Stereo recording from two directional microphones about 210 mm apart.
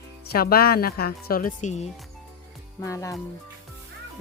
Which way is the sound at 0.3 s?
45° left (ahead or behind).